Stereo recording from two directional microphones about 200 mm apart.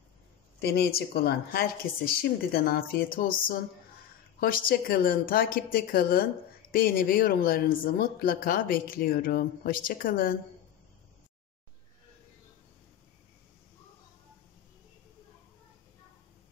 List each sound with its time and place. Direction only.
0.6 s speech: 55° left (ahead or behind)